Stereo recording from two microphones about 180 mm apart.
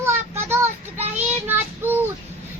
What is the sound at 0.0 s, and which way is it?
Child singing, 15° right (ahead or behind).